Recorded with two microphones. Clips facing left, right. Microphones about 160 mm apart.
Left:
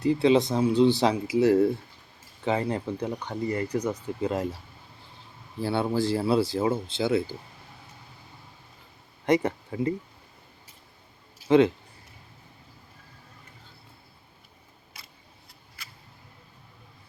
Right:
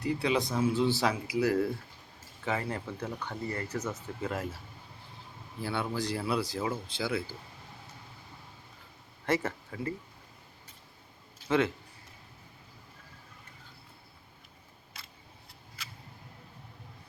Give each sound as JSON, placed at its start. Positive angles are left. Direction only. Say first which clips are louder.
{"t": 0.0, "sound": "speech", "louder": "left 8 dB", "side_deg": 25}
{"t": 5.5, "sound": "speech", "louder": "left 7 dB", "side_deg": 30}
{"t": 9.2, "sound": "speech", "louder": "left 7 dB", "side_deg": 15}
{"t": 11.4, "sound": "speech", "louder": "left 9 dB", "side_deg": 20}